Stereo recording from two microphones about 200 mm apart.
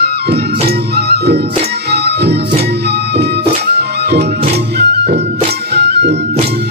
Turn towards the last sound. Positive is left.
turn(degrees=-55)  # may be behind; listen again after turning